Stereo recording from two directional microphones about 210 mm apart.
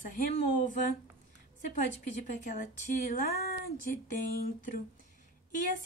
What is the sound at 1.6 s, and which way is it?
A woman's voice, 35° left (ahead or behind).